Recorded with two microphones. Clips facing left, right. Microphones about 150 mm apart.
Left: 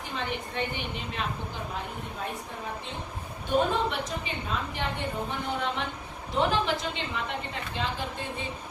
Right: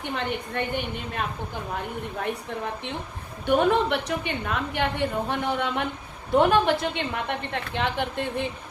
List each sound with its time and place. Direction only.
0.1 s a woman's voice: 55° right (ahead or behind)
3.4 s a woman's voice: 65° right (ahead or behind)